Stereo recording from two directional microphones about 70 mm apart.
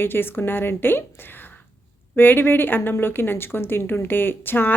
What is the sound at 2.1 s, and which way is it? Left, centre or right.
Speech, left.